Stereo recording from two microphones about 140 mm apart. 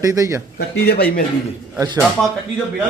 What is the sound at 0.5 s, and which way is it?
Speech, 90° left.